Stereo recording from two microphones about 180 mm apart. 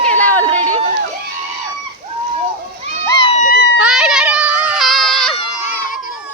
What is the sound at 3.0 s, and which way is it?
Run, 25° left (ahead or behind).